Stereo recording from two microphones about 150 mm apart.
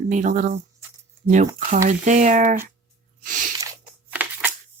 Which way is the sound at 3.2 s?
60° right (ahead or behind).